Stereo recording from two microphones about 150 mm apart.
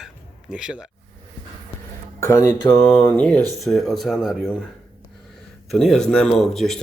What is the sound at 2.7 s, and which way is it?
Speech, 5° left (ahead or behind).